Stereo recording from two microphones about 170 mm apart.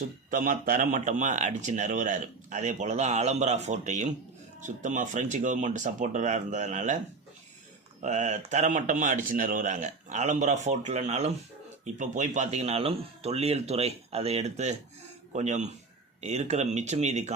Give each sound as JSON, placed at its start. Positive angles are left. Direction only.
{"t": 0.3, "sound": "speech", "side_deg": -55}
{"t": 8.0, "sound": "speech", "side_deg": -45}